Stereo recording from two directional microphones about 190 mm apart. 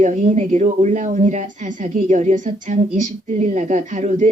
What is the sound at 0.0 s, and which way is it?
Speech, 40° right (ahead or behind).